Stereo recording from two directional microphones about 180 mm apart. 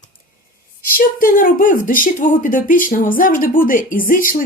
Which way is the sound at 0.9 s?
50° left (ahead or behind).